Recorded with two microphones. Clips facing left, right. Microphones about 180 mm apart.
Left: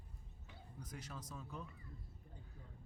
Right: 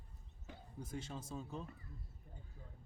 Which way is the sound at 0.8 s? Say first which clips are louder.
Right 5 dB; 25° right (ahead or behind).